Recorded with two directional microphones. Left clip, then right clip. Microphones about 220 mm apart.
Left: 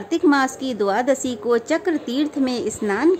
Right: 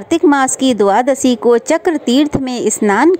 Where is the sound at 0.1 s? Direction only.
35° right (ahead or behind).